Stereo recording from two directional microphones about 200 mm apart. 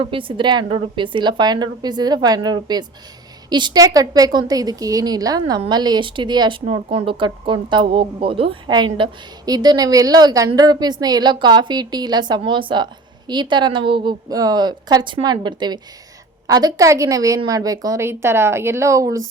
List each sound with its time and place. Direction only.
0.0 s a woman's voice: 25° right (ahead or behind)